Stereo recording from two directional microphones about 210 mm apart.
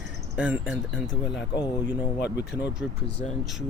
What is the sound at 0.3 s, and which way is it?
Speech, 5° right (ahead or behind).